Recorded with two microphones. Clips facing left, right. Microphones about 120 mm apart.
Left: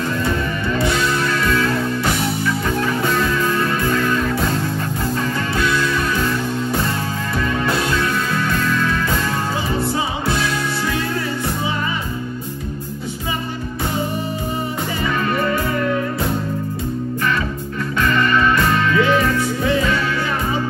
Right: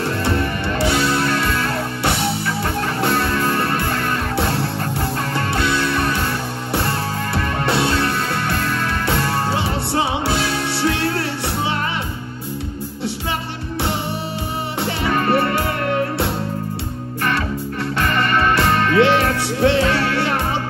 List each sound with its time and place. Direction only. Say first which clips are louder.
0.8 s music: right 3 dB; 30° right (ahead or behind)
3.4 s music: left 1 dB; 45° right (ahead or behind)
5.6 s music: left 1 dB; 30° right (ahead or behind)
7.7 s music: right 1 dB; 30° right (ahead or behind)
10.2 s music: even; 30° right (ahead or behind)
15.0 s music: right 3 dB; 60° right (ahead or behind)
18.0 s music: left 2 dB; 50° right (ahead or behind); by 20.1 s 70° right (ahead or behind)